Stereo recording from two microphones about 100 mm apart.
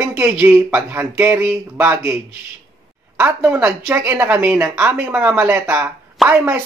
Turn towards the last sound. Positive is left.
turn(degrees=-25)  # may be behind; listen again after turning